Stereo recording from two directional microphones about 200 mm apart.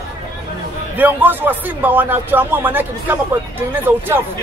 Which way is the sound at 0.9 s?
10° right (ahead or behind).